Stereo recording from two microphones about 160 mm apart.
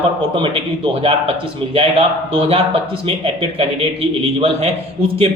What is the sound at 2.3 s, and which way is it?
A man's voice, 35° right (ahead or behind).